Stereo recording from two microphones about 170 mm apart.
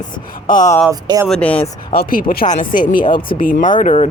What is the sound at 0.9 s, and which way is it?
Speech, 20° right (ahead or behind).